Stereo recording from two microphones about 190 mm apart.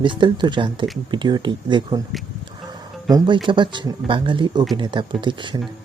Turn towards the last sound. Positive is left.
turn(degrees=-25)  # may be behind; listen again after turning